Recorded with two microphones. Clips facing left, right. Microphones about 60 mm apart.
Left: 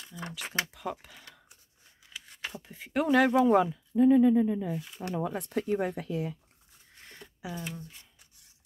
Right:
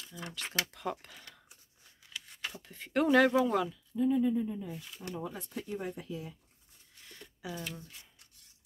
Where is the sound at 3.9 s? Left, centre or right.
Left.